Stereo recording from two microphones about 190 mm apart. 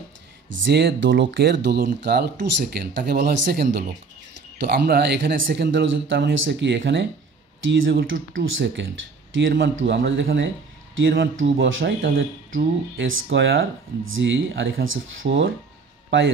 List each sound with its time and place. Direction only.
0.5 s speech: 75° right (ahead or behind)
7.6 s speech: 90° right; by 12.1 s 70° right (ahead or behind)
12.2 s speech: 85° right